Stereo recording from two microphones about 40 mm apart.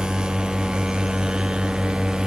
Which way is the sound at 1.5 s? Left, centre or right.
Centre.